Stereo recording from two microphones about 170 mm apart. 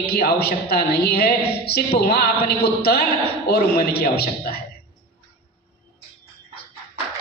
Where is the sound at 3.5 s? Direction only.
65° left (ahead or behind).